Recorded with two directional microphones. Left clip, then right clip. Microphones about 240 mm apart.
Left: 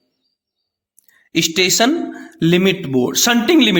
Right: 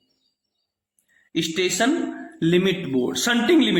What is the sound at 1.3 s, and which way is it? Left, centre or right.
A man's voice, left.